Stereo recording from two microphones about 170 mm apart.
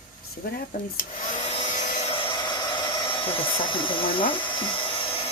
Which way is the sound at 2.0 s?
30° left (ahead or behind).